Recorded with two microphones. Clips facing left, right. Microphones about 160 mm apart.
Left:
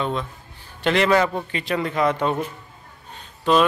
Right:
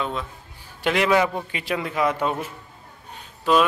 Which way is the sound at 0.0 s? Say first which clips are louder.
Left 3 dB; 5° right (ahead or behind).